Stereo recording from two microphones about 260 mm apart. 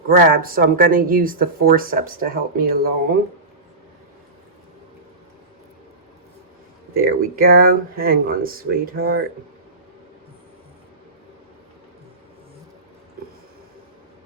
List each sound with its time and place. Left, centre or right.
0.2 s speech: right
7.0 s speech: right